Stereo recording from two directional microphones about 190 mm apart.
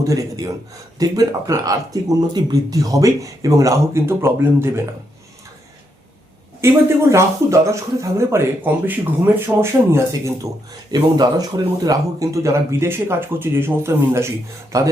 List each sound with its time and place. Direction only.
0.0 s speech: 15° right (ahead or behind)
6.6 s speech: 15° right (ahead or behind)